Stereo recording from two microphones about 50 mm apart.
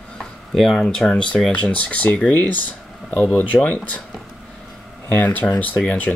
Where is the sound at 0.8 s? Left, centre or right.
Centre.